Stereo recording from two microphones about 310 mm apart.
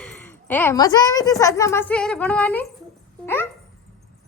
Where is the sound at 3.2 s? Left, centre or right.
Centre.